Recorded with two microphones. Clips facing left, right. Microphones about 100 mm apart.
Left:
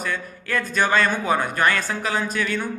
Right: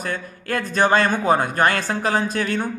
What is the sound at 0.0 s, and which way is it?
A man's voice, 40° right (ahead or behind).